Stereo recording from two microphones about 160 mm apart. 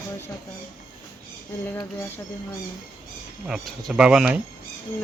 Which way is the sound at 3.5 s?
5° right (ahead or behind).